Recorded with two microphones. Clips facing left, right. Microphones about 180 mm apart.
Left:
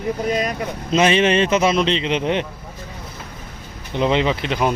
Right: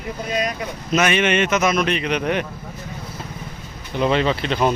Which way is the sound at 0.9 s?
30° left (ahead or behind).